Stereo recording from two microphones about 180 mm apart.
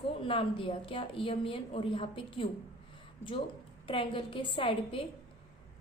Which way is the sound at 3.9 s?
30° left (ahead or behind).